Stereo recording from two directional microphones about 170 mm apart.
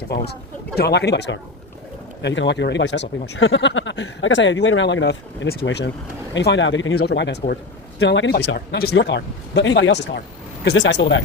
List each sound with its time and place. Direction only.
0.8 s speech: 80° left